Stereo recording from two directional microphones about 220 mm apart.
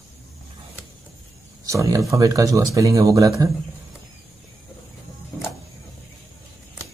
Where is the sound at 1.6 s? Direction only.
15° right (ahead or behind).